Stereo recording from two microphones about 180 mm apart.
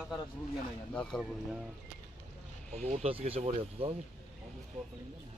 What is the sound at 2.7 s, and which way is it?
Speech, 40° right (ahead or behind).